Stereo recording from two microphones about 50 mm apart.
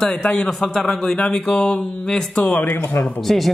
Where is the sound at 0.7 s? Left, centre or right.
Centre.